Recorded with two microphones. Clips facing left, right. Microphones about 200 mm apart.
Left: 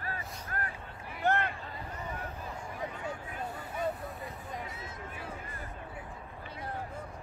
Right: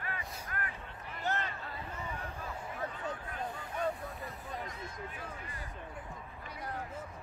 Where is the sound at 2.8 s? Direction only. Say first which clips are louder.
Left 1 dB; 10° left (ahead or behind).